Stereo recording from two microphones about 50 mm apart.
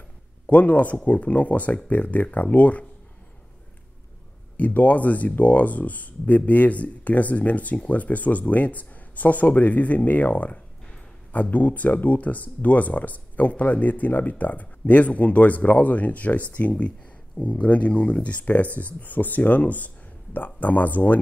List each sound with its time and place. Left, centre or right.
0.5 s speech: left
4.6 s speech: left